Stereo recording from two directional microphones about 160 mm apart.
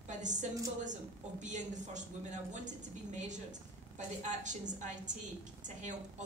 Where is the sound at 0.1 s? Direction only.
50° right (ahead or behind).